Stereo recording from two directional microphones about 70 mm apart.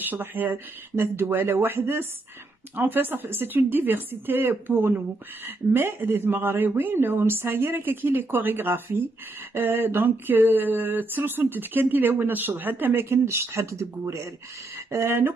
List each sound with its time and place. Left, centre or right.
0.0 s a woman's voice: right
9.5 s a sound: right
14.9 s a woman's voice: right